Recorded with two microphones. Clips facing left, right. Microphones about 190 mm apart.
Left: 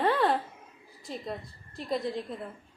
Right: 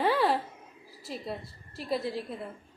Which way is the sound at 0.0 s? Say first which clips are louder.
Even; 5° right (ahead or behind).